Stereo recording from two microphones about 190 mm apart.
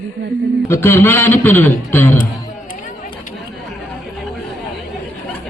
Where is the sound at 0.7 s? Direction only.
10° left (ahead or behind).